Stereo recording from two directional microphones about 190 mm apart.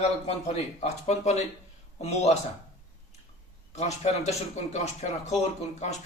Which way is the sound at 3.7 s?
35° left (ahead or behind).